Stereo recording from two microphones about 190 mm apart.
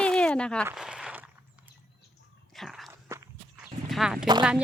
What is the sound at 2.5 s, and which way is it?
Biting, centre (ahead or behind).